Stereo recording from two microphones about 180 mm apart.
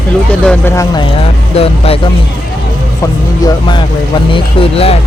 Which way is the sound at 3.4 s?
25° left (ahead or behind).